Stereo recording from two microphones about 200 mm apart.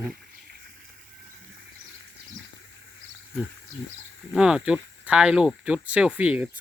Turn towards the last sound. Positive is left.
turn(degrees=-5)  # may be behind; listen again after turning